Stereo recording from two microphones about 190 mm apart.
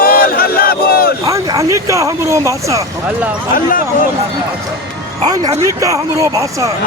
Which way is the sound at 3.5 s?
45° left (ahead or behind).